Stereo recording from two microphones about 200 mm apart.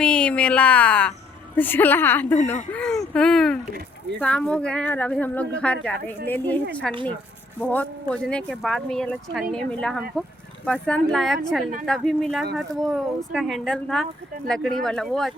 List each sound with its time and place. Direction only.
0.0 s a woman's voice: 5° left (ahead or behind)